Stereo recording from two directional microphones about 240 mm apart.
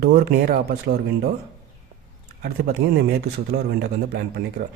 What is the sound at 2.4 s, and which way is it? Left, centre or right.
A man's voice, right.